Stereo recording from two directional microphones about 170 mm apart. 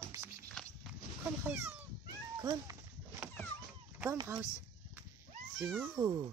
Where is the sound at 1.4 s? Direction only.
10° right (ahead or behind).